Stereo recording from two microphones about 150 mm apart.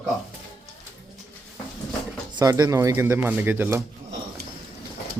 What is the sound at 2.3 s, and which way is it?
Speech, 25° right (ahead or behind).